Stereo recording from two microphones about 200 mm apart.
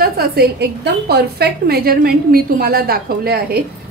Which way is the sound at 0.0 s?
50° right (ahead or behind).